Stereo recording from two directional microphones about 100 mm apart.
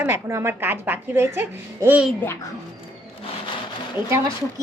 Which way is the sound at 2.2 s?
25° left (ahead or behind).